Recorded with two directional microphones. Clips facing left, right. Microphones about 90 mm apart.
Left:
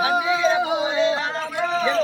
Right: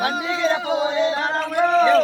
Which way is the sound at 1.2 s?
55° right (ahead or behind).